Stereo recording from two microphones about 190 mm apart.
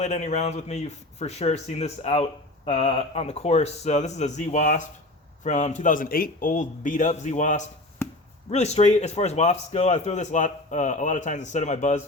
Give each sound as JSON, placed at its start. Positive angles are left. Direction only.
{"t": 0.0, "sound": "a man's voice", "side_deg": 35}